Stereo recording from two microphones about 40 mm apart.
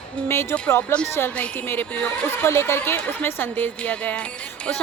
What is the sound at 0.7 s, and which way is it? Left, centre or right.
Speech, left.